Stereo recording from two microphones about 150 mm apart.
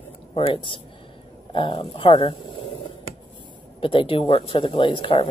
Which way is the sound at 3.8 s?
35° left (ahead or behind).